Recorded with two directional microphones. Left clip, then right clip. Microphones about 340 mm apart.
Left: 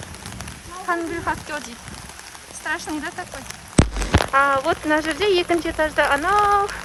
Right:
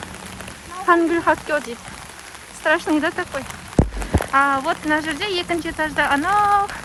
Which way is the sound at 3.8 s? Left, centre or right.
Right.